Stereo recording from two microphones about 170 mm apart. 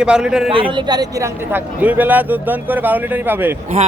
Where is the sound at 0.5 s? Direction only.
30° right (ahead or behind).